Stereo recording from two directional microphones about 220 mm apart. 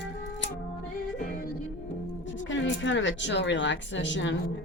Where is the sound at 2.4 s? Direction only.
55° left (ahead or behind).